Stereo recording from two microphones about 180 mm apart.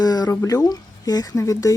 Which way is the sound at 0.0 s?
20° left (ahead or behind).